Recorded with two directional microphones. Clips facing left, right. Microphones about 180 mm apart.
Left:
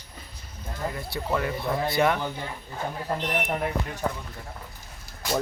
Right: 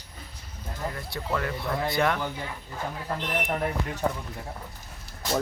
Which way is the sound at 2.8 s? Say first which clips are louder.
Left 3 dB; 20° left (ahead or behind).